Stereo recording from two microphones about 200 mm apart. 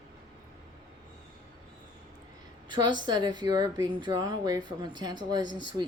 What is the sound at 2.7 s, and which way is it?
A woman's voice, 20° right (ahead or behind).